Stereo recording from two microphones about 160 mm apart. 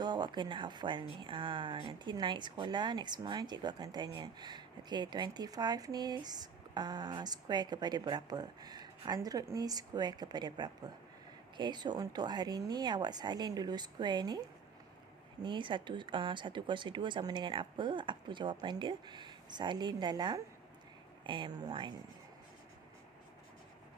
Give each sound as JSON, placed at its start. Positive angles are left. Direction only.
{"t": 0.0, "sound": "speech", "side_deg": -25}